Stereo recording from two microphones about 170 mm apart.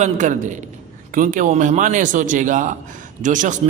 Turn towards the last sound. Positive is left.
turn(degrees=-50)  # may be behind; listen again after turning